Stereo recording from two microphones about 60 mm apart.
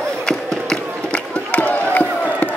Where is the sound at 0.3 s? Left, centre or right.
Centre.